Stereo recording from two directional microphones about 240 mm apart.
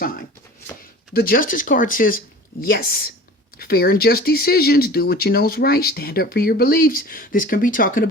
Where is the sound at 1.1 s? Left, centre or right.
Left.